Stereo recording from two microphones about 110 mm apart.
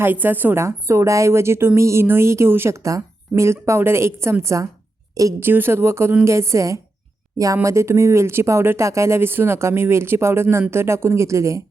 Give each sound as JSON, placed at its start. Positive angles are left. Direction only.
{"t": 0.0, "sound": "a woman's voice", "side_deg": -15}